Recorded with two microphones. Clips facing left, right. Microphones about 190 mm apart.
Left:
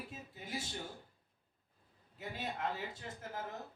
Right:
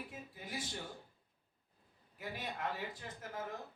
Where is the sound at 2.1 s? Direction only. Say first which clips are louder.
Left 1 dB; 25° left (ahead or behind).